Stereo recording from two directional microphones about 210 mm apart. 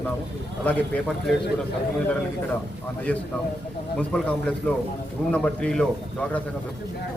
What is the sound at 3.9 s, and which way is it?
A man's voice, 5° left (ahead or behind).